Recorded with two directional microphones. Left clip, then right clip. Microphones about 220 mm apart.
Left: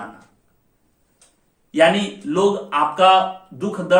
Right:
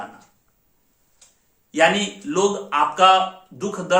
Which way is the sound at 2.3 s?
15° right (ahead or behind).